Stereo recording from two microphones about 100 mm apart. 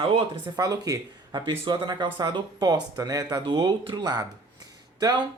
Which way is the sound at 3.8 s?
50° right (ahead or behind).